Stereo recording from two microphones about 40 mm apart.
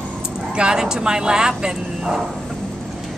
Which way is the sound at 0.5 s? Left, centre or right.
Right.